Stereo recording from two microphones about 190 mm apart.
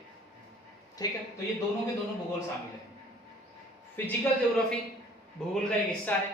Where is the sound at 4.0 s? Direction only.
10° left (ahead or behind).